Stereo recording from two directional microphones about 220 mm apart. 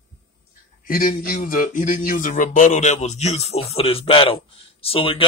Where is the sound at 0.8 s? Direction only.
40° left (ahead or behind).